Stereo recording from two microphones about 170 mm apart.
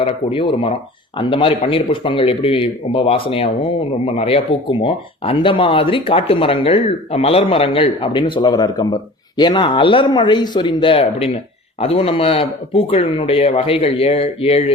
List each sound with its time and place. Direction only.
0.0 s speech: 30° left (ahead or behind)